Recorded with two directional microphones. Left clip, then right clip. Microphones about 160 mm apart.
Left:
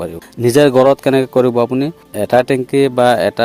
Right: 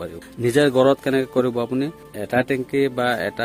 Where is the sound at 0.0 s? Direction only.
35° left (ahead or behind).